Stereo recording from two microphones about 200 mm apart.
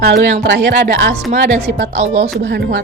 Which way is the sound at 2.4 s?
60° right (ahead or behind).